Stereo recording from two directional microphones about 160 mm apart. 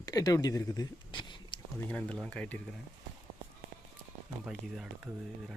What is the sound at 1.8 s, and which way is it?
Speech, 10° left (ahead or behind).